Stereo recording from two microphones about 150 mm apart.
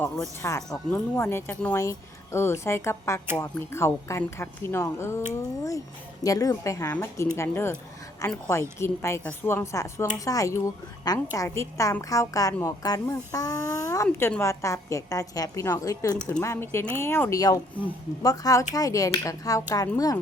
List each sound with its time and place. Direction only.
0.7 s a woman's voice: 15° left (ahead or behind)